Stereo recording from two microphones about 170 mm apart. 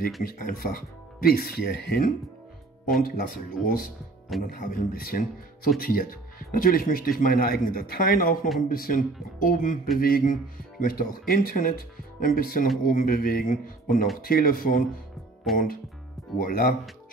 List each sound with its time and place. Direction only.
0.2 s speech: 60° left (ahead or behind)